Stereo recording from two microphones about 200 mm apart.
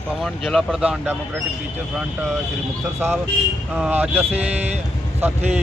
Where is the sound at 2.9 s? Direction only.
10° right (ahead or behind).